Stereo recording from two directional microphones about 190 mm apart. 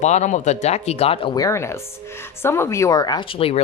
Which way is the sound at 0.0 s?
40° left (ahead or behind).